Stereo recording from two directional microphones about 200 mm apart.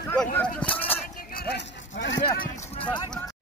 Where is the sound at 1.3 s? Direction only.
50° left (ahead or behind); by 2.2 s 65° left (ahead or behind).